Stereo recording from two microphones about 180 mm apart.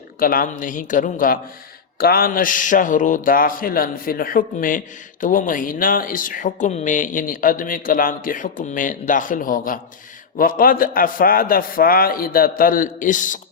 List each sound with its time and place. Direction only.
0.2 s speech: 50° left (ahead or behind)